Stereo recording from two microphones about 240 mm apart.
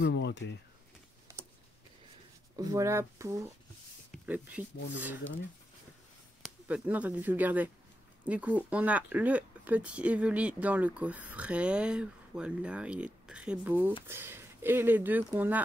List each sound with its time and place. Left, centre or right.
0.0 s speech: left
2.5 s speech: centre
6.4 s speech: centre